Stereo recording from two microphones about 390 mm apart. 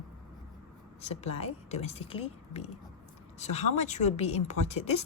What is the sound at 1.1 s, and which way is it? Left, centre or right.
A woman's voice, centre.